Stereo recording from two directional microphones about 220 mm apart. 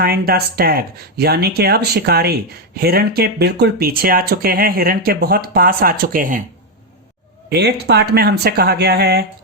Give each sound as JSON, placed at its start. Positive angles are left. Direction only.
{"t": 0.0, "sound": "speech", "side_deg": -45}
{"t": 7.5, "sound": "speech", "side_deg": -50}